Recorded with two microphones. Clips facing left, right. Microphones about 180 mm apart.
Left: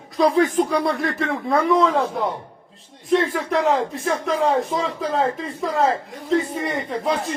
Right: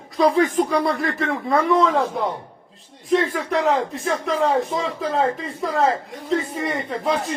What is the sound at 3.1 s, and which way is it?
Speech, centre (ahead or behind).